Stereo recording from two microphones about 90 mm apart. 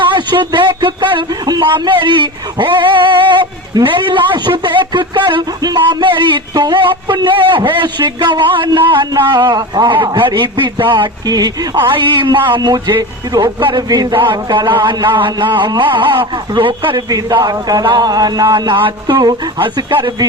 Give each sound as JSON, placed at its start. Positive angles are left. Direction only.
{"t": 0.0, "sound": "speech", "side_deg": -65}
{"t": 9.9, "sound": "speech", "side_deg": -65}
{"t": 11.3, "sound": "a man's voice", "side_deg": -45}
{"t": 11.8, "sound": "speech", "side_deg": -65}
{"t": 13.6, "sound": "speech", "side_deg": -60}
{"t": 17.3, "sound": "a man's voice", "side_deg": -50}
{"t": 19.6, "sound": "speech", "side_deg": -65}